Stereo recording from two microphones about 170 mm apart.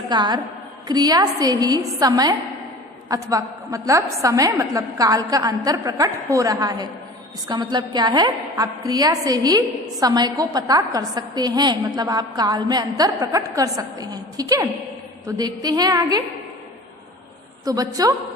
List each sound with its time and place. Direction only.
0.1 s a woman's voice: 25° right (ahead or behind)
17.7 s a woman's voice: 20° right (ahead or behind)